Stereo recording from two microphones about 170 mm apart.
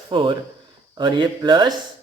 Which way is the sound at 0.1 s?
30° right (ahead or behind).